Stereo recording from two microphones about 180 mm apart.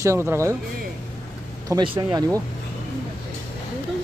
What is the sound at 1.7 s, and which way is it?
Speech, 20° right (ahead or behind).